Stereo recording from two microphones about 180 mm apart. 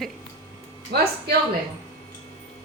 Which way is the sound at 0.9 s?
65° right (ahead or behind).